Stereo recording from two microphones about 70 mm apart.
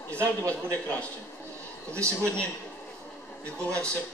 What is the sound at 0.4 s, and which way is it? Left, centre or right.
Speech, right.